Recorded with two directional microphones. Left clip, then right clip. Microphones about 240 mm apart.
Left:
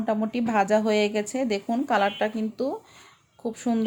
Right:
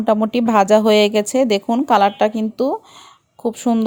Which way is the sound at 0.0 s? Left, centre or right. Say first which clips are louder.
Right 10 dB; right.